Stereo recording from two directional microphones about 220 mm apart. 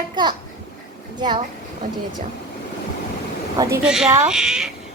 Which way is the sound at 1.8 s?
35° right (ahead or behind).